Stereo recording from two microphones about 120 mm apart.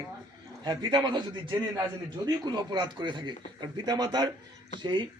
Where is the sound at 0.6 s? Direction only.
35° right (ahead or behind).